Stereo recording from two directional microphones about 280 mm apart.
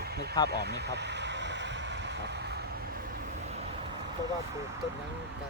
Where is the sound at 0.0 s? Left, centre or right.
Right.